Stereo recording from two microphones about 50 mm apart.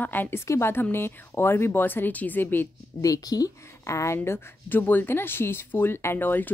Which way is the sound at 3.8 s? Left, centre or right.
Left.